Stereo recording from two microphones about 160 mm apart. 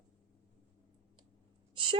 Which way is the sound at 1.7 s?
30° right (ahead or behind).